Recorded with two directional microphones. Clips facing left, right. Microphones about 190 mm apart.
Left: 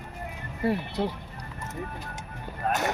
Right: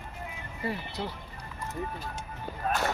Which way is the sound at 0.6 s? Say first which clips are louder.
Left 7 dB; 60° left (ahead or behind).